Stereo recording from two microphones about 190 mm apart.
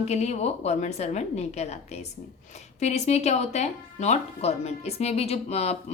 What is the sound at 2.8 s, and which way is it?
A woman's voice, 35° left (ahead or behind).